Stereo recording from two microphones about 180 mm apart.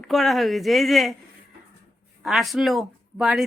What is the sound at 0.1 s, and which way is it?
Speech, centre (ahead or behind).